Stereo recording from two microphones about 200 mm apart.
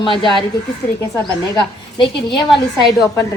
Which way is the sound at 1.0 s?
15° left (ahead or behind).